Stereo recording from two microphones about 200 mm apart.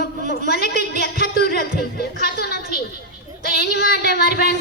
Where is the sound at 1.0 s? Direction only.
50° left (ahead or behind).